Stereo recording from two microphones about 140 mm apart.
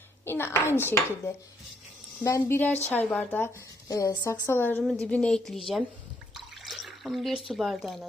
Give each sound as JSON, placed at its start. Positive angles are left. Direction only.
{"t": 0.3, "sound": "a child's voice", "side_deg": 15}
{"t": 4.8, "sound": "speech", "side_deg": 5}
{"t": 6.3, "sound": "drip", "side_deg": 0}
{"t": 7.4, "sound": "speech", "side_deg": 0}